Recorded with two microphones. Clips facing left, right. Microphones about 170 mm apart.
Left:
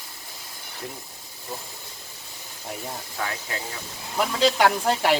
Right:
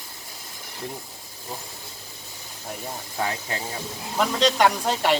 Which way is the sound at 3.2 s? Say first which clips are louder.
Right 4 dB; 25° right (ahead or behind).